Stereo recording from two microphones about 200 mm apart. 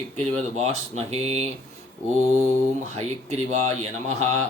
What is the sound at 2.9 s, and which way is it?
A man's voice, 35° right (ahead or behind).